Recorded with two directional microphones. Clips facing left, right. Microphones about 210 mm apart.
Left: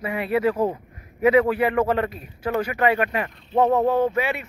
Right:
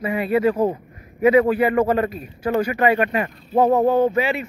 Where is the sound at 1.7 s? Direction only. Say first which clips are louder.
Right 3 dB; 10° right (ahead or behind).